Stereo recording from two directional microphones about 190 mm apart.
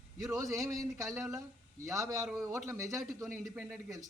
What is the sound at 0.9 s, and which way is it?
A man's voice, centre (ahead or behind).